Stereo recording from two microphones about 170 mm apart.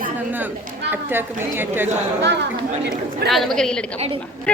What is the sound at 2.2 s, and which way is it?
Speech, 90° right.